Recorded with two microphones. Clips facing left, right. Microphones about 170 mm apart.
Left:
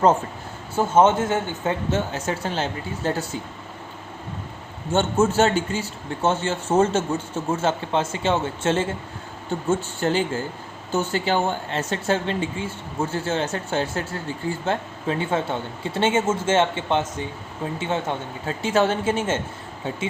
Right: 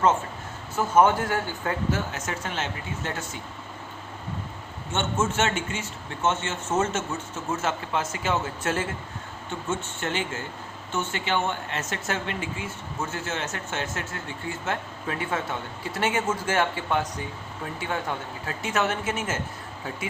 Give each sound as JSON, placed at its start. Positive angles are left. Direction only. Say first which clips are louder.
{"t": 0.8, "sound": "speech", "louder": "left 3 dB", "side_deg": 25}
{"t": 4.9, "sound": "speech", "louder": "left 7 dB", "side_deg": 35}